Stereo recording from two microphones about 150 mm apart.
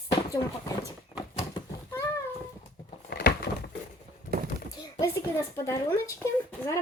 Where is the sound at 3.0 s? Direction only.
90° left.